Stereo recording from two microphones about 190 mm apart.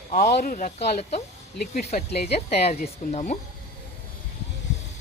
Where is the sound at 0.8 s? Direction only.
35° left (ahead or behind).